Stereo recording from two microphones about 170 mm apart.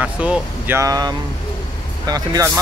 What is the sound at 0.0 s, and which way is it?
Speech, 10° right (ahead or behind).